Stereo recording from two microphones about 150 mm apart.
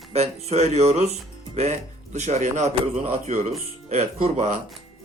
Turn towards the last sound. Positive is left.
turn(degrees=-45)  # may be behind; listen again after turning